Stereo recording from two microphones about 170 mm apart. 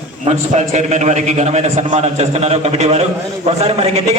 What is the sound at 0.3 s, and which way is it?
A man's voice, 40° right (ahead or behind).